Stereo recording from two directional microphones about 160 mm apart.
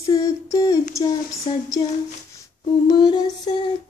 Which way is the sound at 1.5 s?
30° left (ahead or behind).